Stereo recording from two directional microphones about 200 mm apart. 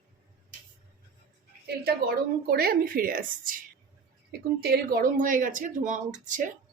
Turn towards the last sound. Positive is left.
turn(degrees=-40)  # may be behind; listen again after turning